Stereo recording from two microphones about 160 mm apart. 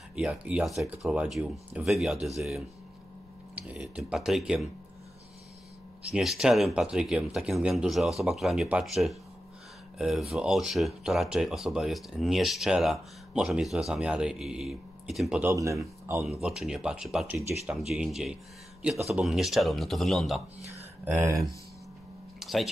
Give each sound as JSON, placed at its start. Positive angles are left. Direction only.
{"t": 0.1, "sound": "speech", "side_deg": -5}
{"t": 6.1, "sound": "speech", "side_deg": -5}
{"t": 15.5, "sound": "speech", "side_deg": -20}
{"t": 16.3, "sound": "speech", "side_deg": -5}
{"t": 21.0, "sound": "speech", "side_deg": -15}
{"t": 22.4, "sound": "a sound", "side_deg": 0}